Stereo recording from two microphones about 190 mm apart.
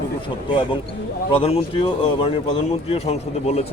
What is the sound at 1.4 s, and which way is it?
Speech, 30° left (ahead or behind).